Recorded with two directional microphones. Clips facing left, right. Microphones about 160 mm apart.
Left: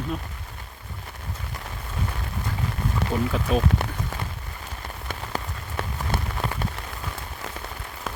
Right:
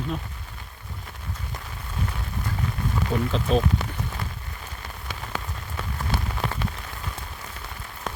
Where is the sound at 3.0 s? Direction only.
70° left (ahead or behind).